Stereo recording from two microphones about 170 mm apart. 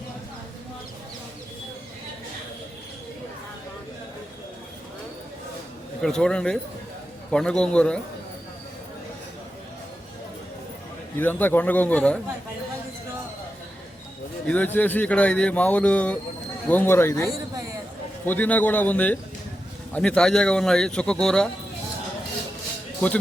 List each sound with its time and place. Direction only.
6.0 s a man's voice: 5° left (ahead or behind)
11.2 s speech: 10° left (ahead or behind)
14.4 s speech: 10° left (ahead or behind)
17.2 s a sound: 20° right (ahead or behind)
18.3 s a man's voice: 10° left (ahead or behind)